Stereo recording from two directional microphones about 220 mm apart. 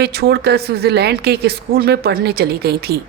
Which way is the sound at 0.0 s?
45° right (ahead or behind).